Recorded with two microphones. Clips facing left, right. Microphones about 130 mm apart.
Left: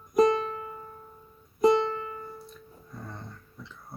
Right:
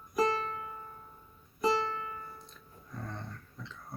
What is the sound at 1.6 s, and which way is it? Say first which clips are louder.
Music: left 8 dB; 20° left (ahead or behind).